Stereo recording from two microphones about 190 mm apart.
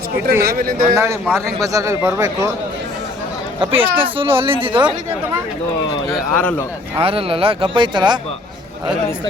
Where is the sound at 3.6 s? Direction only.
30° right (ahead or behind).